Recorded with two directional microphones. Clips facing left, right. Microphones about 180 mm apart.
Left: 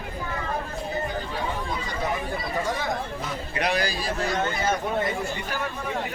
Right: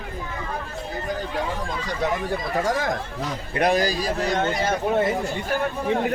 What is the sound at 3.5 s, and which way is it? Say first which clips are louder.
Speech: right 6 dB; 45° right (ahead or behind).